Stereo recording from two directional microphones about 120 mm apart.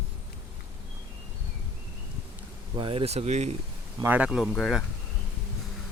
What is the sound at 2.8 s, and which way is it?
Speech, 50° right (ahead or behind).